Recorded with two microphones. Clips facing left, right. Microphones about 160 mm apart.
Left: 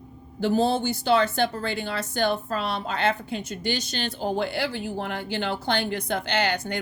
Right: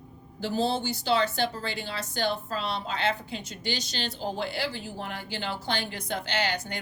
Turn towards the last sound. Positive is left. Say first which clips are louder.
# left 4 dB
turn(degrees=55)  # may be behind; listen again after turning